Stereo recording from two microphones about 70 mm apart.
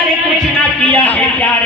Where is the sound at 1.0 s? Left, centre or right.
Centre.